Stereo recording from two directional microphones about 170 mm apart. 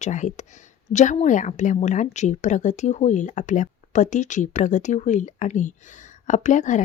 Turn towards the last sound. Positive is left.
turn(degrees=45)  # may be behind; listen again after turning